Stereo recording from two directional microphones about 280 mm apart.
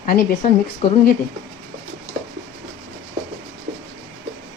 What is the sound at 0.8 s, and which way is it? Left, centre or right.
Speech, centre.